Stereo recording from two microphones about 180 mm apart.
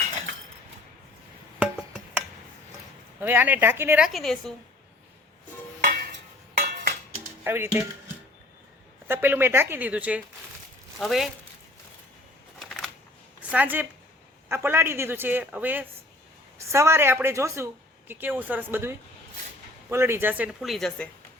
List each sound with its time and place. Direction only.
3.2 s speech: 10° right (ahead or behind)
5.8 s a sound: 55° right (ahead or behind)
7.4 s speech: 15° right (ahead or behind)
9.0 s speech: 10° right (ahead or behind)
12.5 s a sound: centre (ahead or behind)
13.4 s speech: 10° right (ahead or behind)